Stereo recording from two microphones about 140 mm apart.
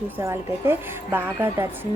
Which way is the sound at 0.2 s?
20° right (ahead or behind).